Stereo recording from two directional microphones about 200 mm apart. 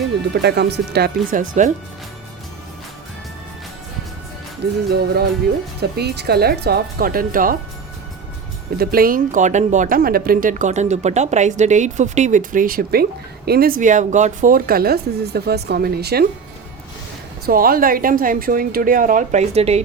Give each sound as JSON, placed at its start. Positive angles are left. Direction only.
{"t": 0.4, "sound": "speech", "side_deg": -55}
{"t": 4.9, "sound": "speech", "side_deg": -55}
{"t": 8.8, "sound": "speech", "side_deg": -50}
{"t": 17.4, "sound": "speech", "side_deg": -45}